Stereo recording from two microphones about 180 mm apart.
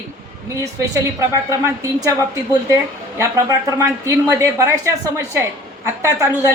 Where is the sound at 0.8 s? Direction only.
20° right (ahead or behind).